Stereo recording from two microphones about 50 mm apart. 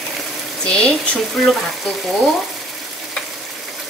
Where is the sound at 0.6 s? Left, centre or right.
Centre.